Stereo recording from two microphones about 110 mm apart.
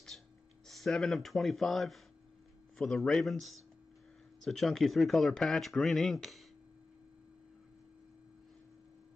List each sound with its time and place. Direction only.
0.7 s speech: centre (ahead or behind)